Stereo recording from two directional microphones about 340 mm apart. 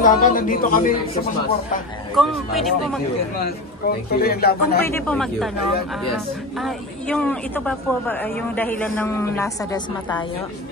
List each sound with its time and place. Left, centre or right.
0.0 s a man's voice: left
2.1 s speech: centre
3.4 s a man's voice: left
4.8 s speech: centre
6.6 s speech: centre